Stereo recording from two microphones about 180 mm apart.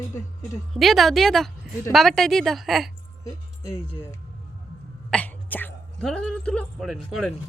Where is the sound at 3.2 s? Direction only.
15° left (ahead or behind).